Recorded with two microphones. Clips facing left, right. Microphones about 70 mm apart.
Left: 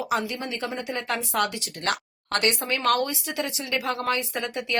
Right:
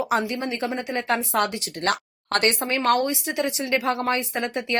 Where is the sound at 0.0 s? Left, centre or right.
Right.